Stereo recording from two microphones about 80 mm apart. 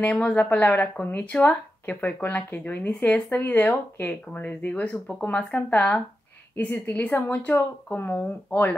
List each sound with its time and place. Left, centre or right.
0.0 s speech: centre